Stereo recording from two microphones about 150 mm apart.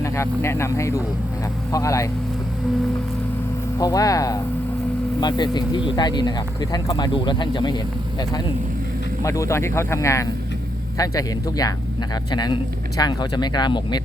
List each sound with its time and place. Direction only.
0.0 s speech: 20° left (ahead or behind)
3.8 s speech: 25° left (ahead or behind)
9.2 s speech: 20° left (ahead or behind)